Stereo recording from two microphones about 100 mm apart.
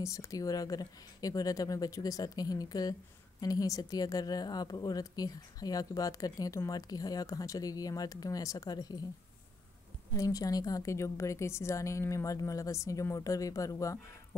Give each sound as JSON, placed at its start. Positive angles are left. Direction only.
{"t": 0.0, "sound": "speech", "side_deg": 35}
{"t": 10.1, "sound": "speech", "side_deg": 35}